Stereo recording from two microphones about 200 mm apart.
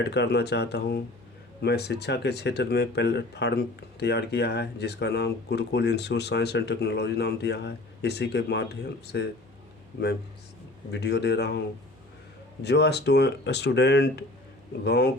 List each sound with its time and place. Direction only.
0.0 s speech: 55° left (ahead or behind)
10.9 s speech: 55° left (ahead or behind)
12.6 s speech: 55° left (ahead or behind)